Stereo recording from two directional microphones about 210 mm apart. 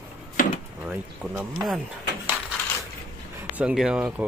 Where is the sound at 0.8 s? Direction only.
5° right (ahead or behind).